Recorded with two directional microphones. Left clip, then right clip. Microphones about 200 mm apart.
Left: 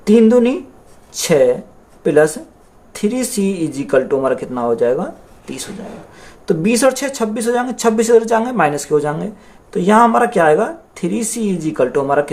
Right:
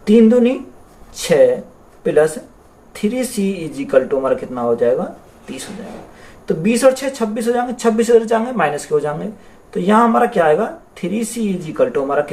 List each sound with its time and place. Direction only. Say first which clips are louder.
0.0 s speech: left 1 dB; 55° left (ahead or behind)
6.4 s speech: even; 55° left (ahead or behind)